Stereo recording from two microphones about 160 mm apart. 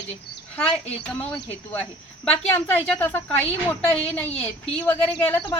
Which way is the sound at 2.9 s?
10° left (ahead or behind).